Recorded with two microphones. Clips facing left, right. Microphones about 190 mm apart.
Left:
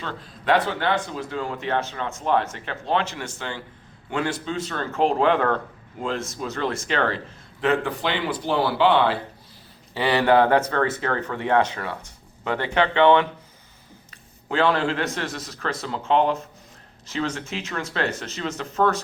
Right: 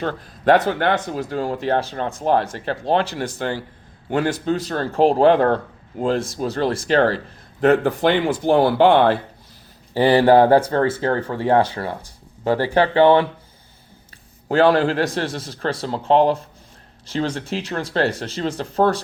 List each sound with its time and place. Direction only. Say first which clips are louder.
0.0 s speech: right 9 dB; 45° right (ahead or behind)
9.9 s speech: right 6 dB; 35° right (ahead or behind)
14.4 s speech: right 6 dB; 40° right (ahead or behind)